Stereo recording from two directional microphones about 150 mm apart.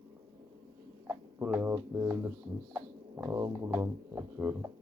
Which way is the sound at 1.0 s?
15° right (ahead or behind).